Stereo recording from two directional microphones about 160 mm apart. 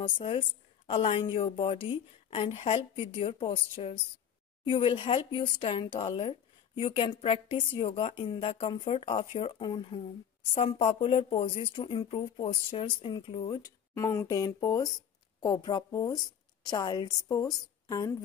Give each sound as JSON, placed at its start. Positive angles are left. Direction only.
{"t": 0.0, "sound": "a woman's voice", "side_deg": 40}
{"t": 13.9, "sound": "a woman's voice", "side_deg": 20}